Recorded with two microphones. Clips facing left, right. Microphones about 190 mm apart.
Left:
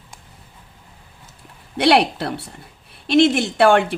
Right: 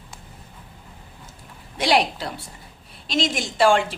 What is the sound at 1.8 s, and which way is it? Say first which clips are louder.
A woman's voice: left 5 dB; 65° left (ahead or behind).